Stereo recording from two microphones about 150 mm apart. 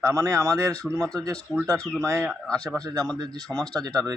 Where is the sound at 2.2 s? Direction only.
5° left (ahead or behind).